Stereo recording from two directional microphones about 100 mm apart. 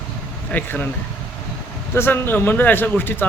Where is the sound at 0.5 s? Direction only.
20° left (ahead or behind).